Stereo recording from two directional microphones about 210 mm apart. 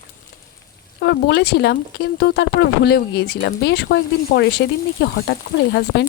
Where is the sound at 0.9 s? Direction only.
55° left (ahead or behind).